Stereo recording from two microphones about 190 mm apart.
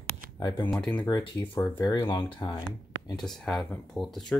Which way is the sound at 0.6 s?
5° left (ahead or behind).